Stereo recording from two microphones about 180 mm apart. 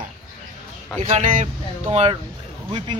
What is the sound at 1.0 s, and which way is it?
Speech, 35° right (ahead or behind).